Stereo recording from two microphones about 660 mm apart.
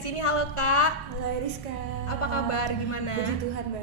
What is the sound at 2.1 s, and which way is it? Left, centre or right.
A woman's voice, left.